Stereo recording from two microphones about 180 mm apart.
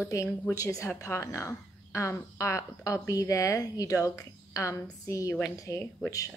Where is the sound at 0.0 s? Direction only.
15° left (ahead or behind).